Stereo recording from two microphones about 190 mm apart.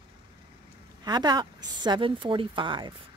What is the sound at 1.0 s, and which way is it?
Speech, 20° right (ahead or behind).